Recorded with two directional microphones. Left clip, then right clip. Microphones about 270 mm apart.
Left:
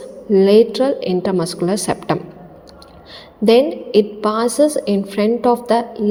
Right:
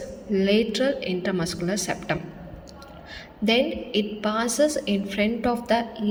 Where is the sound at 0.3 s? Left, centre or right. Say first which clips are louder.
Left 12 dB; left.